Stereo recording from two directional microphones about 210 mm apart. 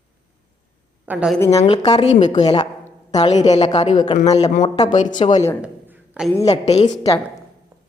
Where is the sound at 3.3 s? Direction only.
30° left (ahead or behind).